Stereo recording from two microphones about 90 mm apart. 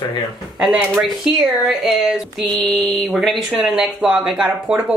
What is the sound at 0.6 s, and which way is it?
Speech, centre (ahead or behind).